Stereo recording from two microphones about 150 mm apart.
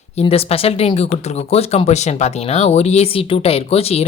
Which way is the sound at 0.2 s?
40° left (ahead or behind).